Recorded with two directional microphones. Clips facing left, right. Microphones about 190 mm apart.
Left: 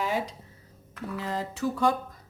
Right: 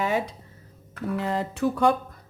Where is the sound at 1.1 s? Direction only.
60° right (ahead or behind).